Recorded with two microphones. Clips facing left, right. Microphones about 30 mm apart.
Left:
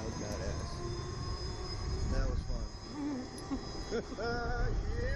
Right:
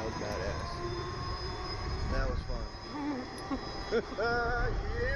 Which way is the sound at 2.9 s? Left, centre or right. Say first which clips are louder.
Right 2 dB; right.